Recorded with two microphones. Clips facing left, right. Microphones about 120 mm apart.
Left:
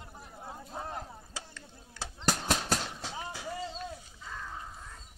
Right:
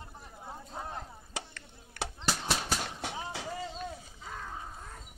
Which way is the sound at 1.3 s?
70° right (ahead or behind).